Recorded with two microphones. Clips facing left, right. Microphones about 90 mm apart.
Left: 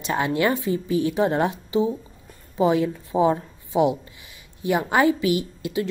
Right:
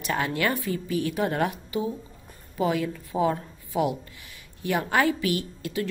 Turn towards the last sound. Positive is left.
turn(degrees=20)  # may be behind; listen again after turning